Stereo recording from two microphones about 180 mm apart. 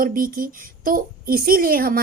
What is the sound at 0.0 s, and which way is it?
A woman's voice, 50° right (ahead or behind).